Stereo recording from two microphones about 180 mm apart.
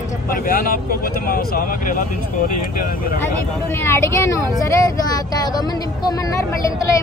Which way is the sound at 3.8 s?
15° left (ahead or behind).